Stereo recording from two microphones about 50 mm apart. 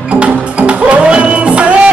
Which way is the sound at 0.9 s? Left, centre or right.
Right.